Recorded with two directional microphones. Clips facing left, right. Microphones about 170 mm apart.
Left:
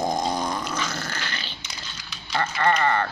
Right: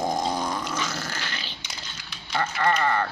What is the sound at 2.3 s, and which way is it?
Speech, 5° right (ahead or behind).